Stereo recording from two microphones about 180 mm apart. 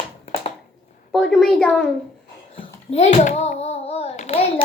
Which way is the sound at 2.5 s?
35° left (ahead or behind).